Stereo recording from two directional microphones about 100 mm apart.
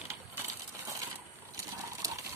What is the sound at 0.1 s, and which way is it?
Crushing, 30° right (ahead or behind).